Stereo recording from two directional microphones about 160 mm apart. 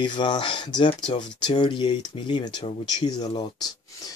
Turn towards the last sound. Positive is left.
turn(degrees=30)  # may be behind; listen again after turning